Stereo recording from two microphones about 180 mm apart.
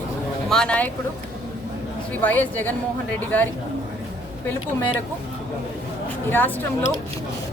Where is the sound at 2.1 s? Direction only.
10° left (ahead or behind).